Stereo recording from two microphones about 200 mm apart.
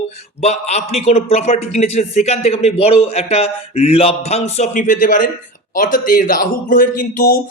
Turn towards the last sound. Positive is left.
turn(degrees=40)  # may be behind; listen again after turning